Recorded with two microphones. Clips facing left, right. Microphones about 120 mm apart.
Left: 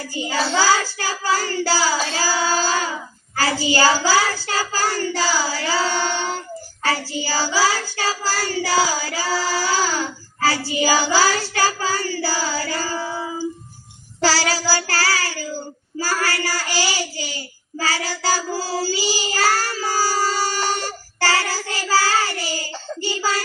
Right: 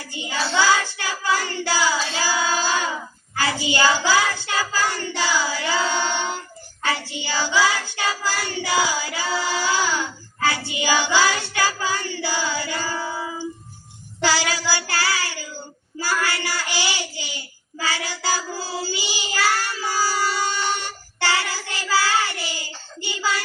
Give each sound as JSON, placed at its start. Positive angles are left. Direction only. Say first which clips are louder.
{"t": 0.1, "sound": "child singing", "louder": "left 3 dB", "side_deg": 35}
{"t": 5.9, "sound": "child singing", "louder": "left 1 dB", "side_deg": -20}
{"t": 6.8, "sound": "child singing", "louder": "left 3 dB", "side_deg": 35}
{"t": 9.2, "sound": "child singing", "louder": "left 2 dB", "side_deg": -20}
{"t": 9.5, "sound": "child singing", "louder": "even", "side_deg": 35}
{"t": 17.7, "sound": "child singing", "louder": "left 3 dB", "side_deg": 40}